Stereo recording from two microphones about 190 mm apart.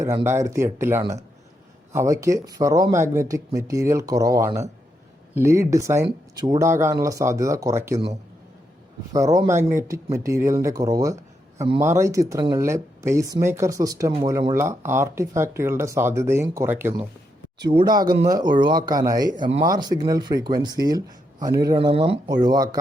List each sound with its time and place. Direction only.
0.0 s speech: 15° right (ahead or behind)
9.1 s speech: 20° right (ahead or behind)
17.6 s speech: 25° right (ahead or behind)